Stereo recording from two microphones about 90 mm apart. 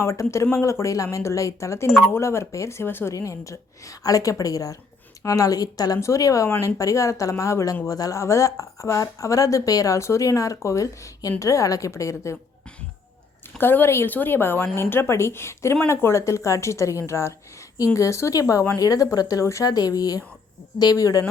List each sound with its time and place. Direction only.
0.0 s speech: 30° left (ahead or behind)
13.6 s a woman's voice: 25° left (ahead or behind)
19.7 s speech: 45° left (ahead or behind)